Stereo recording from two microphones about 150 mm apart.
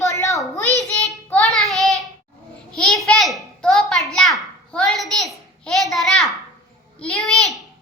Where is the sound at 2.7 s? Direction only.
5° left (ahead or behind).